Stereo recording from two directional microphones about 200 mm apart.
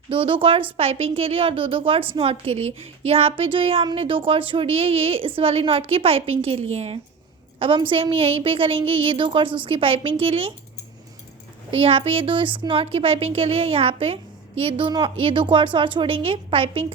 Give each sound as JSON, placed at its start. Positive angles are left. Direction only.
{"t": 0.1, "sound": "a woman's voice", "side_deg": -25}
{"t": 11.7, "sound": "speech", "side_deg": -30}